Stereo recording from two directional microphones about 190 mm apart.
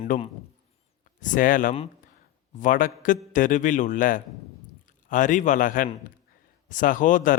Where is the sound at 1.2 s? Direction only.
45° left (ahead or behind).